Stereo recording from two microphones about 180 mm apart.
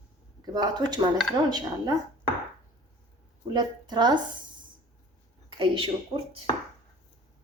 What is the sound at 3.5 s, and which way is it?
Speech, 25° right (ahead or behind).